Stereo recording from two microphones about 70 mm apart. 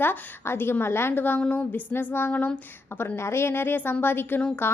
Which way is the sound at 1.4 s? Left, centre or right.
Left.